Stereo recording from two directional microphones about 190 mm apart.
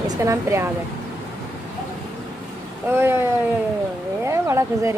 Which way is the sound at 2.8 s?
10° right (ahead or behind).